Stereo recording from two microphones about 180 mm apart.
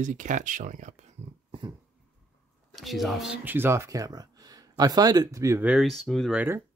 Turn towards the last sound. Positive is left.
turn(degrees=0)  # may be behind; listen again after turning